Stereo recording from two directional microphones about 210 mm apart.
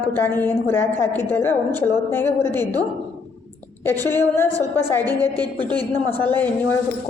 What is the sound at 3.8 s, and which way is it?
A woman's voice, 10° left (ahead or behind).